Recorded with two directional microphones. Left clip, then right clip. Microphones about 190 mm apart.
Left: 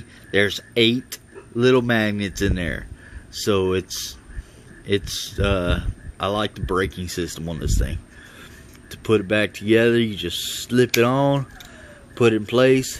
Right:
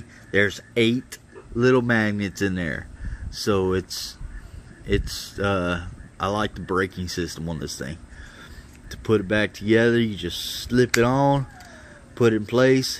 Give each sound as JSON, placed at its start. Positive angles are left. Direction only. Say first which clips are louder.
{"t": 0.3, "sound": "speech", "louder": "left 1 dB", "side_deg": -5}